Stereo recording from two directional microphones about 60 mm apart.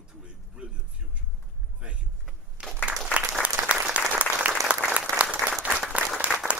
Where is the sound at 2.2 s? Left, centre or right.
Centre.